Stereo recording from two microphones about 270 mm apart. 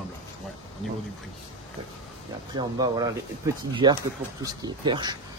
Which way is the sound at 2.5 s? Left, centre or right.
Centre.